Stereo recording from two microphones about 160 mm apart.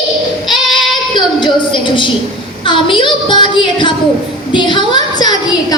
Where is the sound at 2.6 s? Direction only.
30° left (ahead or behind).